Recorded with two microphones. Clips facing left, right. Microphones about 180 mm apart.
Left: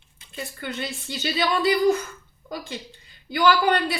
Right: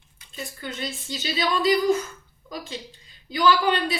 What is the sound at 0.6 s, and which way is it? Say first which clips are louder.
Speech: left 1 dB; 60° left (ahead or behind).